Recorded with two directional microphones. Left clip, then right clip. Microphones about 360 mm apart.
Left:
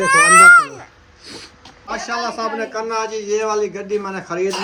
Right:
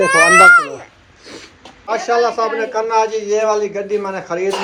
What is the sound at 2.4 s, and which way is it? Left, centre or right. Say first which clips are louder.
A man's voice: right 4 dB; centre.